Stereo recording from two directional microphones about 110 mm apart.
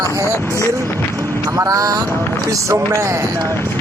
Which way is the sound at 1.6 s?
30° right (ahead or behind).